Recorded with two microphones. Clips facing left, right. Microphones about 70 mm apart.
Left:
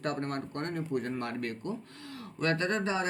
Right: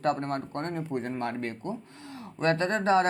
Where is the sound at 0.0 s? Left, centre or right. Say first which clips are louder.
Right 5 dB; right.